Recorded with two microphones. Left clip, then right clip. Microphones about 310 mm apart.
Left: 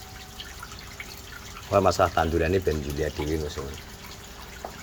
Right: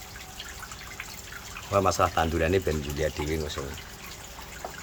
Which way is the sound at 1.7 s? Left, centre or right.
Centre.